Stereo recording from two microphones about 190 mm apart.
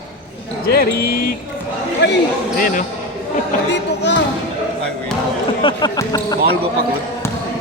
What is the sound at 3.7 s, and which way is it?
Speech, 65° left (ahead or behind).